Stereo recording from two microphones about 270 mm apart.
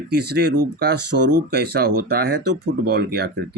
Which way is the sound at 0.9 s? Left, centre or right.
Right.